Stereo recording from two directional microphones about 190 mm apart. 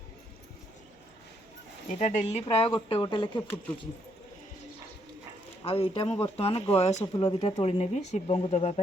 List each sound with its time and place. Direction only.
1.9 s speech: 40° left (ahead or behind)
5.6 s speech: 30° left (ahead or behind)
7.1 s speech: 20° left (ahead or behind)